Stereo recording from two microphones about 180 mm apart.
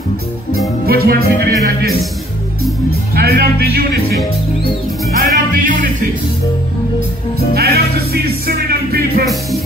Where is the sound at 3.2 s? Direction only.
60° right (ahead or behind).